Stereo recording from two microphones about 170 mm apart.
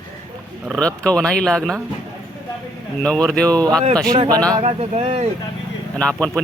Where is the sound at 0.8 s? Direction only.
5° left (ahead or behind).